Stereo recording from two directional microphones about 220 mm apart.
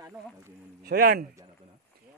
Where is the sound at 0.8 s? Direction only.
45° right (ahead or behind).